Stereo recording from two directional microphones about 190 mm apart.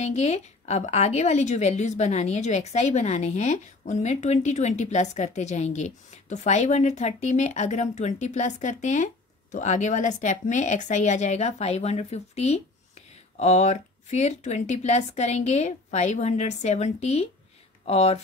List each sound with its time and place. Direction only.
0.0 s a woman's voice: 35° left (ahead or behind)